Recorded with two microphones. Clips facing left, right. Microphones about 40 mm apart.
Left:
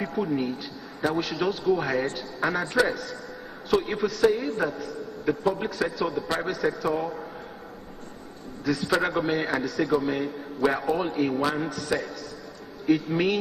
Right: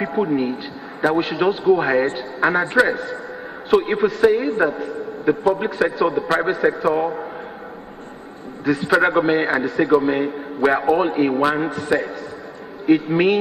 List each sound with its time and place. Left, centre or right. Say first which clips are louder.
0.0 s a man's voice: right 7 dB; right
8.6 s a man's voice: right 8 dB; right